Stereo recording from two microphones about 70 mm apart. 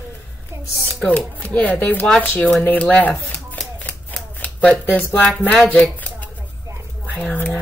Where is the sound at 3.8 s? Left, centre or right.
Left.